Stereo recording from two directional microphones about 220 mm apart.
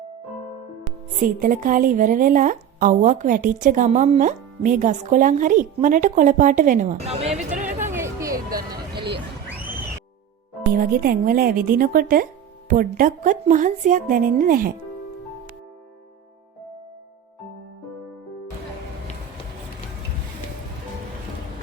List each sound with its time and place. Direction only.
1.2 s a woman's voice: 35° right (ahead or behind)
7.9 s a sound: 15° right (ahead or behind)
10.8 s a woman's voice: 40° right (ahead or behind)